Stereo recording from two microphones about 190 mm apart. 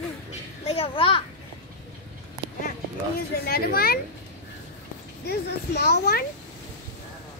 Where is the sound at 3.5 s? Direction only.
55° left (ahead or behind).